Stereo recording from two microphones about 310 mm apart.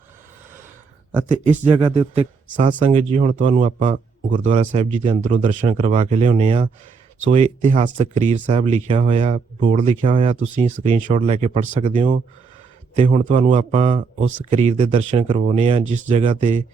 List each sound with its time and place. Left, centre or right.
1.6 s speech: centre